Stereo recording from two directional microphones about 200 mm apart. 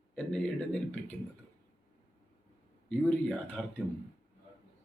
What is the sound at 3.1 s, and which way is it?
Speech, 5° left (ahead or behind).